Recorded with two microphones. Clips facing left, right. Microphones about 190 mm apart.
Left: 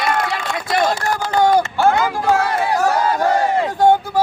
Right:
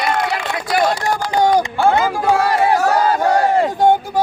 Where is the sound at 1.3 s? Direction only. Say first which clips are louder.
Even; 15° right (ahead or behind).